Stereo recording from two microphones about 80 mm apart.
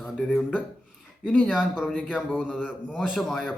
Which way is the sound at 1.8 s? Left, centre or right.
Centre.